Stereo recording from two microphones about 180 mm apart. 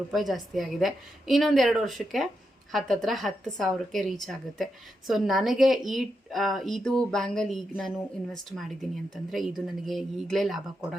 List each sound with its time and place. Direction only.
0.1 s a woman's voice: centre (ahead or behind)